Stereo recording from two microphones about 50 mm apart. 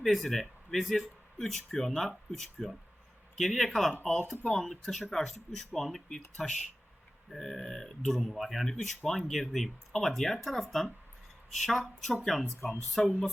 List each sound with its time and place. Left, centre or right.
0.0 s speech: centre
12.5 s speech: left